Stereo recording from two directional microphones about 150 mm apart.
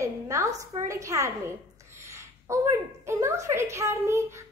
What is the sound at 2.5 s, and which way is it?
A child's voice, 20° right (ahead or behind).